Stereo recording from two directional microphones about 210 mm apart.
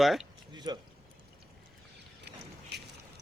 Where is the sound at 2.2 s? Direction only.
50° right (ahead or behind).